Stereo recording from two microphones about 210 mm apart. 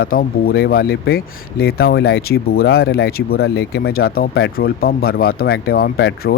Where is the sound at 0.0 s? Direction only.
45° left (ahead or behind).